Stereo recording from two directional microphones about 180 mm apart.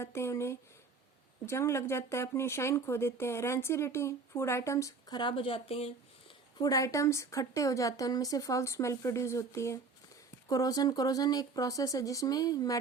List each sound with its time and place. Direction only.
0.0 s speech: 15° left (ahead or behind); by 6.3 s 35° left (ahead or behind)
6.6 s speech: 20° left (ahead or behind)